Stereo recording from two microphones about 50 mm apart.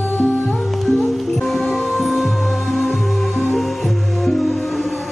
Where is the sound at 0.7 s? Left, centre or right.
Centre.